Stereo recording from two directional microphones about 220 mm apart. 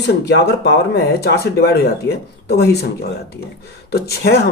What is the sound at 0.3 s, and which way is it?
Speech, 50° left (ahead or behind).